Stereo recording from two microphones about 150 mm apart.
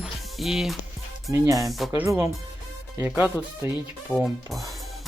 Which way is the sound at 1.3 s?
20° right (ahead or behind).